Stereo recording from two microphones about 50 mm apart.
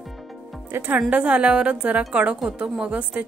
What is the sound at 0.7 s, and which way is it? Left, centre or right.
Speech, right.